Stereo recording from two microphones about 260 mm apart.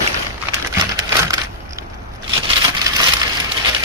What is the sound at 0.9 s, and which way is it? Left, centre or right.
Crushing, centre.